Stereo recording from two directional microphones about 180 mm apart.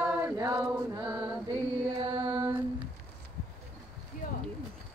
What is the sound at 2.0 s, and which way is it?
Mantra, 30° right (ahead or behind).